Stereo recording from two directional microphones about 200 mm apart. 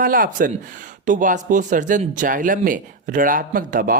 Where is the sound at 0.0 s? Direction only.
45° right (ahead or behind).